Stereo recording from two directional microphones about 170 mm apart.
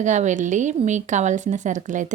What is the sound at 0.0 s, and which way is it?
Speech, 45° right (ahead or behind).